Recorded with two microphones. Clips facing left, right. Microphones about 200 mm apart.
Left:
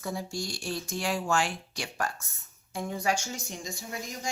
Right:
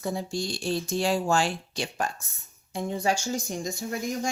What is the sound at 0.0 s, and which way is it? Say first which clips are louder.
Speech: right 4 dB; 25° right (ahead or behind).